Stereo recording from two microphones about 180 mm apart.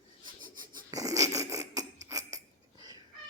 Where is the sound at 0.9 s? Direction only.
20° right (ahead or behind).